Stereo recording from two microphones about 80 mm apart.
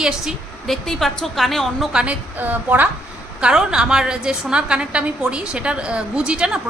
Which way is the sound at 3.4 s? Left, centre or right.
Centre.